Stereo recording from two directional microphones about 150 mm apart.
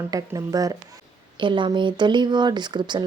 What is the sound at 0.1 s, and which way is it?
Speech, 25° right (ahead or behind).